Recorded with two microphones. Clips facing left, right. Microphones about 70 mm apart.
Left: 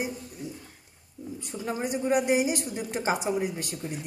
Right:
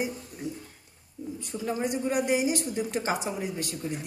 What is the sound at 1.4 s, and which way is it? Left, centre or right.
Speech, left.